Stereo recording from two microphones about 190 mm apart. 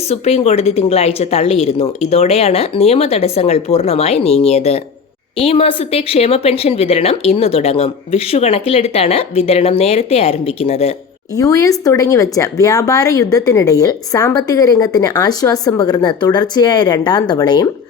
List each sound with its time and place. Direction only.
0.1 s a woman's voice: 35° left (ahead or behind)
11.3 s speech: 20° left (ahead or behind)